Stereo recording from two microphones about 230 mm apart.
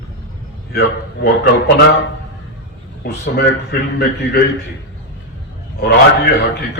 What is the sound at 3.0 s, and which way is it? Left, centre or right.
Speech, left.